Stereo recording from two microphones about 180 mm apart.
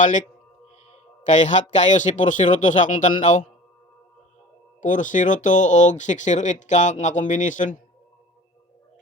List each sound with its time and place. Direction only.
0.0 s speech: 45° left (ahead or behind)
4.8 s speech: 45° left (ahead or behind)